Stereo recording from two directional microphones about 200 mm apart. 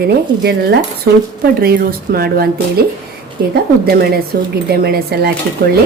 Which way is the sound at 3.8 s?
50° right (ahead or behind).